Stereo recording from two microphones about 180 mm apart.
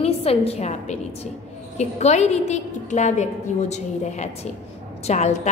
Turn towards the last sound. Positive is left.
turn(degrees=40)  # may be behind; listen again after turning